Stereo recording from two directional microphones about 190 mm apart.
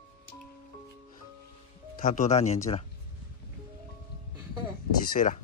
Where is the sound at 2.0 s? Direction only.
40° left (ahead or behind).